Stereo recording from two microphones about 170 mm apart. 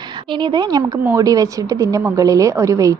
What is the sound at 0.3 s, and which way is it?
A woman's voice, 25° right (ahead or behind).